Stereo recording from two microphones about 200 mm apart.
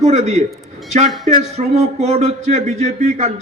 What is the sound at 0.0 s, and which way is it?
A man's voice, 35° right (ahead or behind).